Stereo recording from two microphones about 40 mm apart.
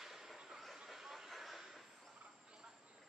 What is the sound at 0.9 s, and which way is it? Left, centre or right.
Vehicle, centre.